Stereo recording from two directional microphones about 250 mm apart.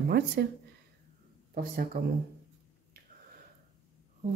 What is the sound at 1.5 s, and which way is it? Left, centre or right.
Speech, right.